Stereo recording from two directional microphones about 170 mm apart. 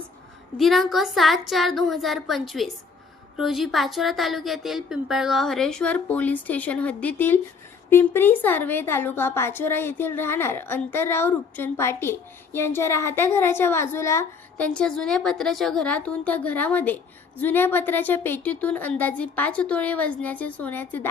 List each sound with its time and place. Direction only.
0.6 s a woman's voice: centre (ahead or behind); by 14.7 s 15° left (ahead or behind)
14.7 s a woman's voice: 5° left (ahead or behind)